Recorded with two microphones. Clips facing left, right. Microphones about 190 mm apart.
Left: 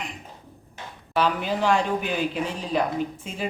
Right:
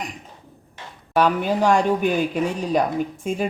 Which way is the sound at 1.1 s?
45° right (ahead or behind).